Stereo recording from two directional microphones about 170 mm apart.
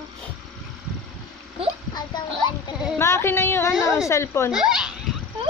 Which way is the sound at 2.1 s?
25° left (ahead or behind).